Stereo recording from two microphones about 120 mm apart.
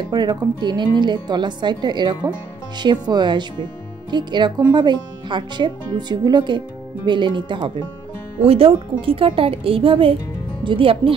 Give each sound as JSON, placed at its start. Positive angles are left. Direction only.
{"t": 0.1, "sound": "speech", "side_deg": -35}
{"t": 8.4, "sound": "a woman's voice", "side_deg": -55}